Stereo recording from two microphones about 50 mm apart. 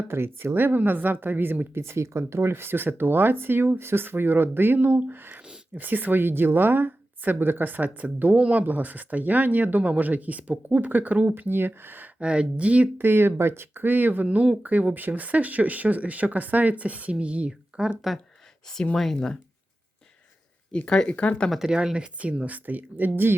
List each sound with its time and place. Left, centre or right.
0.1 s speech: right
1.8 s speech: right
8.4 s speech: right
8.6 s speech: right
11.4 s speech: right
12.2 s speech: right
13.0 s speech: right
13.8 s speech: right
14.6 s speech: right; by 17.9 s centre
18.9 s speech: centre
20.7 s speech: centre
21.7 s speech: centre; by 23.3 s right